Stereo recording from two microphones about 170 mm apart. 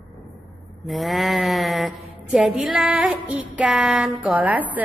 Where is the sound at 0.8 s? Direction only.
Centre (ahead or behind).